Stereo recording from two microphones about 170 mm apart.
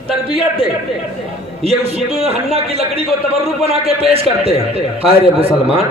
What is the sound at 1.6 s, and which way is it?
A man's voice, 35° right (ahead or behind).